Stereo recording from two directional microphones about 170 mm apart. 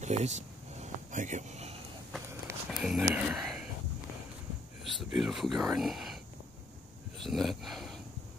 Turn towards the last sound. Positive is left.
turn(degrees=0)  # may be behind; listen again after turning